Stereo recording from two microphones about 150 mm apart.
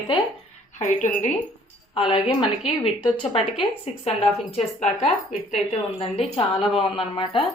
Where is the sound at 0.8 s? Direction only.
55° left (ahead or behind).